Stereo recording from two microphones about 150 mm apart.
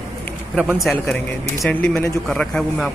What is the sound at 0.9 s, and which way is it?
A man's voice, 5° left (ahead or behind).